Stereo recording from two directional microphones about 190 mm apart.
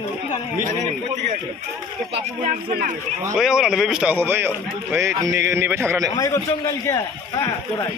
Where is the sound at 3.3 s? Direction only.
5° right (ahead or behind).